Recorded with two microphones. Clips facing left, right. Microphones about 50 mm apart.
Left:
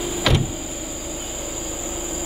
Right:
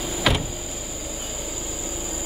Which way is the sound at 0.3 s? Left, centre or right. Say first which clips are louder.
Left 1 dB; centre.